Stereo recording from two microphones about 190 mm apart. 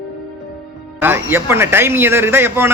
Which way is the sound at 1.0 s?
10° right (ahead or behind).